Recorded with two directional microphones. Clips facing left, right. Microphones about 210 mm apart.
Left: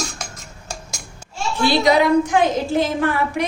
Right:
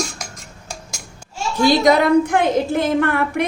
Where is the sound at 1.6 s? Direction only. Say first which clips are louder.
Right 2 dB; 45° right (ahead or behind).